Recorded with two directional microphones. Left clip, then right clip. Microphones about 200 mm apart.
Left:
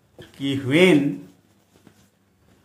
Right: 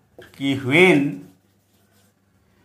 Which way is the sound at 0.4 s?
40° right (ahead or behind).